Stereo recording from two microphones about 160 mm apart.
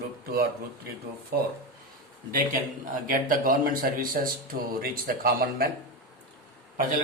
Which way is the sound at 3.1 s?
60° right (ahead or behind).